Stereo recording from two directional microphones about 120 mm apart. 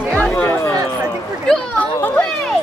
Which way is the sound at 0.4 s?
20° left (ahead or behind).